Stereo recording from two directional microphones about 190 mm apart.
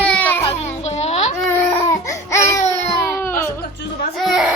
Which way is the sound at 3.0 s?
10° left (ahead or behind).